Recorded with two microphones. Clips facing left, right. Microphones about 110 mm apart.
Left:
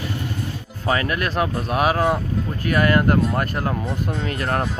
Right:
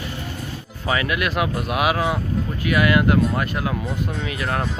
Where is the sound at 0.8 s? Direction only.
40° left (ahead or behind).